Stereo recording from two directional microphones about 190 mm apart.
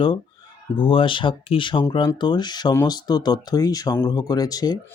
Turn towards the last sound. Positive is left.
turn(degrees=20)  # may be behind; listen again after turning